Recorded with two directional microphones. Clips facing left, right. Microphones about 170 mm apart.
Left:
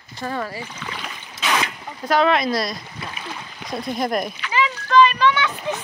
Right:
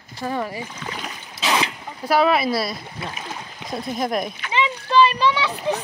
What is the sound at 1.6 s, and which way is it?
Speech, 10° right (ahead or behind).